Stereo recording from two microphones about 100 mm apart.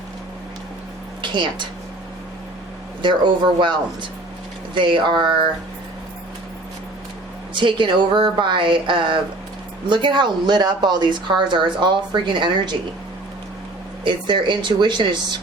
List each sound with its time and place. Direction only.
1.2 s speech: 50° right (ahead or behind)
3.0 s speech: 50° right (ahead or behind)
7.5 s speech: 55° right (ahead or behind)
14.0 s speech: 55° right (ahead or behind)